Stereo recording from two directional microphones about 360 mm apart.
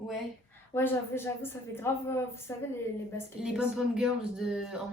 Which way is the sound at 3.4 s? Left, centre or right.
Centre.